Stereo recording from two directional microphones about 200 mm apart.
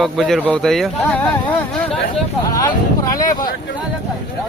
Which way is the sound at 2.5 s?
15° left (ahead or behind).